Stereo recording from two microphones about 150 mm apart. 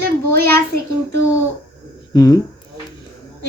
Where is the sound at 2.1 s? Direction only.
25° left (ahead or behind).